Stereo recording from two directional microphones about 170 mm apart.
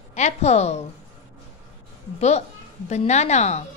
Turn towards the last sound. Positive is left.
turn(degrees=40)  # may be behind; listen again after turning